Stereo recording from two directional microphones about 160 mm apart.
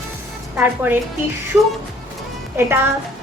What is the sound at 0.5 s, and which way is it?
Speech, 10° right (ahead or behind).